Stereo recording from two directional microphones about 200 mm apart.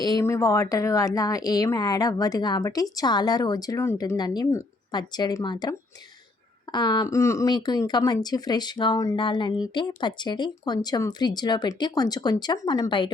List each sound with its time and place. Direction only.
0.0 s a woman's voice: 20° left (ahead or behind)